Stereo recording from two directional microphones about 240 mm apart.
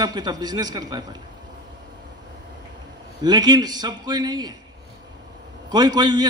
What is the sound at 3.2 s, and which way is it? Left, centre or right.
A man's voice, centre.